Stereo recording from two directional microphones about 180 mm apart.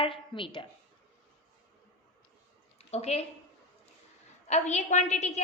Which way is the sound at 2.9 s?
35° left (ahead or behind).